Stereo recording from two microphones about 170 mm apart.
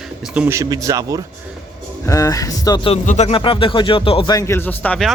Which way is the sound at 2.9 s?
45° left (ahead or behind).